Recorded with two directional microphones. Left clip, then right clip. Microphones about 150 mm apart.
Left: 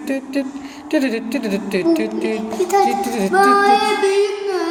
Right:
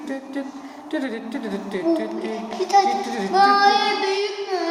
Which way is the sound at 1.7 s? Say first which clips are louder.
Left 4 dB; 20° left (ahead or behind).